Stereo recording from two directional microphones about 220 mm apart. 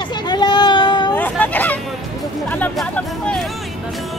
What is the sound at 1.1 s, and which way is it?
Hubbub, 10° left (ahead or behind).